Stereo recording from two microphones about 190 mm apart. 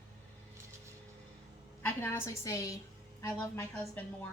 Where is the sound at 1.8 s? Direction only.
10° left (ahead or behind).